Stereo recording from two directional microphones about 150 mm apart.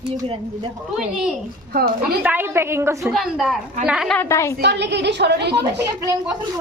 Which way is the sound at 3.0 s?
Centre (ahead or behind).